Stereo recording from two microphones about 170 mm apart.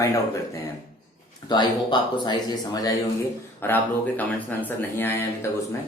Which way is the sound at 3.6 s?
15° left (ahead or behind).